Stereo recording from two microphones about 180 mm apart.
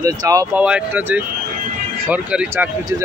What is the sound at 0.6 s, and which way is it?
Speech, 5° right (ahead or behind).